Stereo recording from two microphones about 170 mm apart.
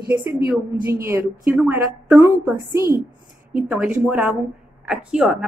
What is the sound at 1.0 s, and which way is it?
A woman's voice, 10° right (ahead or behind).